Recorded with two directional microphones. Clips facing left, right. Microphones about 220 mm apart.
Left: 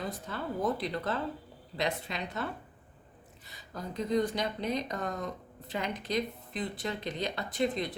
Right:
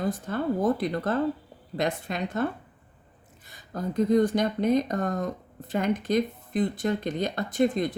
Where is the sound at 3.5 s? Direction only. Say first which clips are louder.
Right 8 dB; 50° right (ahead or behind).